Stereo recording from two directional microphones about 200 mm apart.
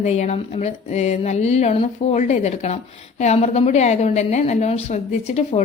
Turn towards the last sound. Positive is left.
turn(degrees=35)  # may be behind; listen again after turning